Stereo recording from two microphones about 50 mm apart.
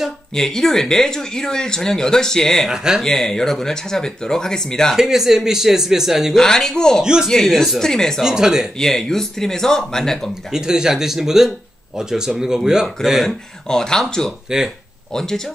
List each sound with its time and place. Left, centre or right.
0.3 s speech: centre
2.7 s speech: centre
3.0 s speech: centre
4.9 s speech: centre
6.3 s speech: centre
7.0 s speech: centre
7.2 s speech: centre
8.2 s speech: centre
8.7 s speech: centre
10.5 s speech: centre